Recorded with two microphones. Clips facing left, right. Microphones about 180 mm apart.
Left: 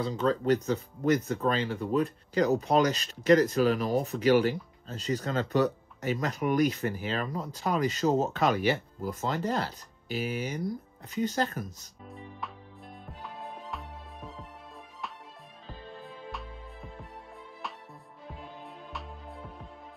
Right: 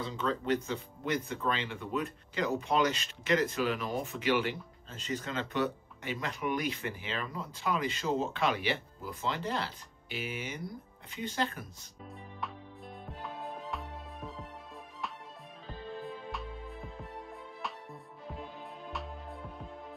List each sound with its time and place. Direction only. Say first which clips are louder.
0.0 s speech: left 6 dB; 40° left (ahead or behind)
13.2 s music: right 1 dB; centre (ahead or behind)
16.0 s music: right 2 dB; centre (ahead or behind)
18.9 s music: right 1 dB; centre (ahead or behind)